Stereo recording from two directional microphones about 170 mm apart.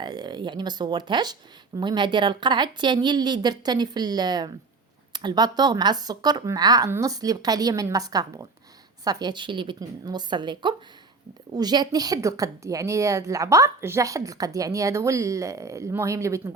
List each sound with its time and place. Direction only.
0.0 s a woman's voice: 25° right (ahead or behind)